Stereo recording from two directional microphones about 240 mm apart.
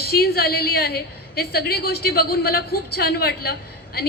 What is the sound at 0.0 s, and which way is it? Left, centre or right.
A woman's voice, left.